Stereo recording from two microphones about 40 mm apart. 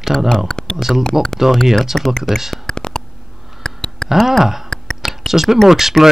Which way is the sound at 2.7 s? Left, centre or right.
Centre.